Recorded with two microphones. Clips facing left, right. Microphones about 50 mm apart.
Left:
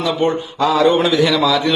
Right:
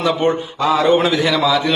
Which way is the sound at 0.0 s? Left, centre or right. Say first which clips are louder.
Right 1 dB; right.